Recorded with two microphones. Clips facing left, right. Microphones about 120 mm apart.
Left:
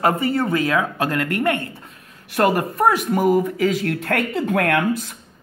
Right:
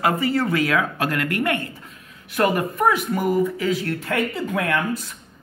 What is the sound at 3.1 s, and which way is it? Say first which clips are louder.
Speech: left 3 dB; 55° left (ahead or behind).